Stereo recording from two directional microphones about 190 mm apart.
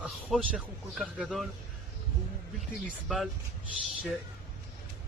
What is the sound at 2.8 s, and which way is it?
Speech, centre (ahead or behind).